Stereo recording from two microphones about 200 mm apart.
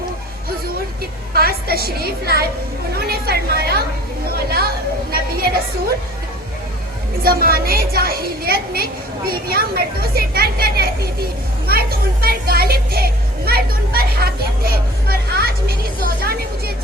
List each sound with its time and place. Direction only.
1.3 s speech: 50° right (ahead or behind)
3.0 s a sound: 50° right (ahead or behind)
4.4 s chatter: 50° right (ahead or behind)
7.2 s speech: 50° right (ahead or behind)